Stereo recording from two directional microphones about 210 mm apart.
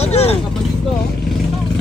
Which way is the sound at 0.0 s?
30° left (ahead or behind).